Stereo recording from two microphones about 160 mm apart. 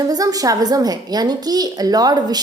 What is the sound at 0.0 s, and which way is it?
A woman's voice, 20° right (ahead or behind).